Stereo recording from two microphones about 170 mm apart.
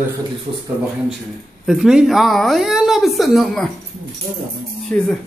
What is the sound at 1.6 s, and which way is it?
Speech, 5° right (ahead or behind).